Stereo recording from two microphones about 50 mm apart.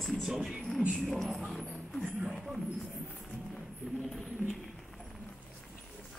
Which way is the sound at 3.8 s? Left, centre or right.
Right.